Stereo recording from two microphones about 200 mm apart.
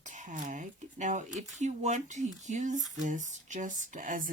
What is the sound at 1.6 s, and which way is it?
Speech, 35° right (ahead or behind).